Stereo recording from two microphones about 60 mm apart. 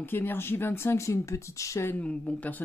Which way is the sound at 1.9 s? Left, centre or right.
Left.